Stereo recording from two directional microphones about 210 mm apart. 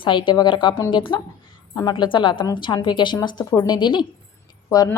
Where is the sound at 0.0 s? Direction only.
25° left (ahead or behind).